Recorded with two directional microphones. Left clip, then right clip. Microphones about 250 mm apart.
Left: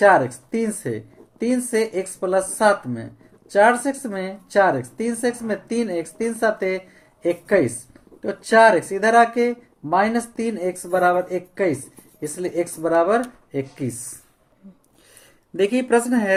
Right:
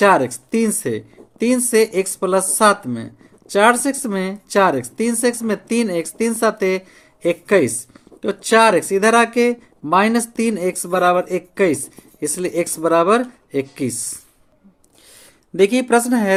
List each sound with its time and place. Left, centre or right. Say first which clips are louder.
0.0 s speech: right 1 dB; right
15.5 s speech: right 4 dB; right